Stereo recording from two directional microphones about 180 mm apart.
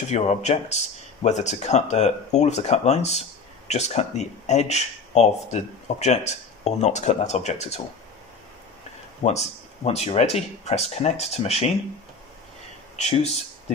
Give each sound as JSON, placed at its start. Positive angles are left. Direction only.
{"t": 0.1, "sound": "speech", "side_deg": 40}
{"t": 9.2, "sound": "speech", "side_deg": 40}
{"t": 12.9, "sound": "speech", "side_deg": 35}